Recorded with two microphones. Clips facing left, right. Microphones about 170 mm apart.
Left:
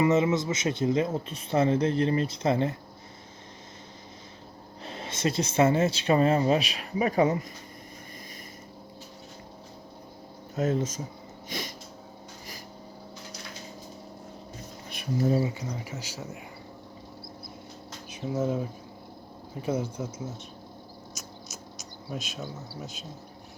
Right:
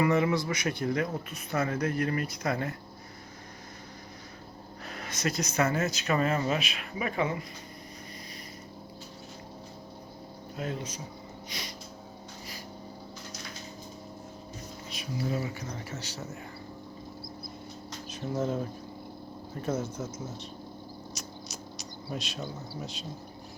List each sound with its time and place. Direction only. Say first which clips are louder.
0.0 s speech: left 3 dB; 20° left (ahead or behind)
4.9 s speech: left 4 dB; 25° left (ahead or behind)
10.6 s speech: left 9 dB; 45° left (ahead or behind)
11.4 s a sound: left 7 dB; 50° left (ahead or behind)
14.8 s a sound: left 7 dB; 55° left (ahead or behind)
15.3 s speech: left 6 dB; 25° left (ahead or behind); by 16.4 s 10° left (ahead or behind)
18.1 s speech: left 2 dB; 10° left (ahead or behind)
22.1 s speech: even; centre (ahead or behind)